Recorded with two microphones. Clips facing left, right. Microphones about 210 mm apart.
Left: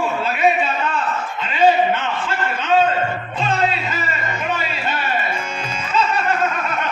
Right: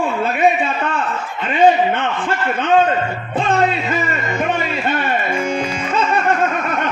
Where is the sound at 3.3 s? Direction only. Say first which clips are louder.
Right 5 dB; 55° right (ahead or behind).